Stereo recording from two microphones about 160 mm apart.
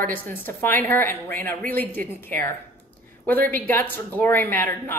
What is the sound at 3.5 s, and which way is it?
A woman's voice, 15° left (ahead or behind).